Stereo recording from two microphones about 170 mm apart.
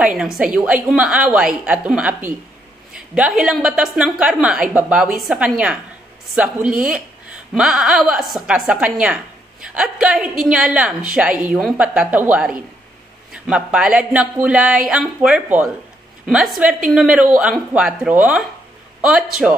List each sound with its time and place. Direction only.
0.0 s speech: 5° right (ahead or behind)